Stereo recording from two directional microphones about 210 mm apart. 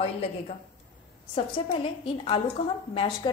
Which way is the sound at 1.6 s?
25° left (ahead or behind).